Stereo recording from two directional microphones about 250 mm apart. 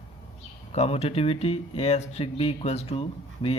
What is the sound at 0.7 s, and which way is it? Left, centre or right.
Speech, left.